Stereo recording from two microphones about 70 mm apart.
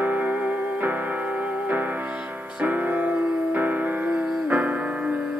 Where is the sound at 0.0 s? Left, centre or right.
Right.